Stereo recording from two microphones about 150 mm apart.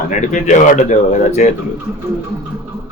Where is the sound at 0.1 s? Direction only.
55° left (ahead or behind).